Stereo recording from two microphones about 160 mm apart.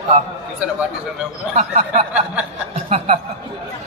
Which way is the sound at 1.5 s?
45° right (ahead or behind).